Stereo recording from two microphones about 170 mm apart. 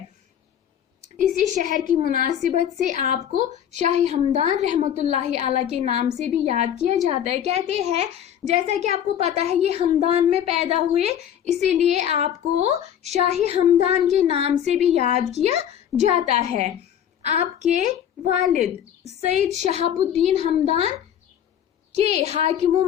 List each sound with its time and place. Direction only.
1.5 s a woman's voice: 45° right (ahead or behind)
19.0 s a woman's voice: 40° right (ahead or behind)
21.9 s a woman's voice: 40° right (ahead or behind)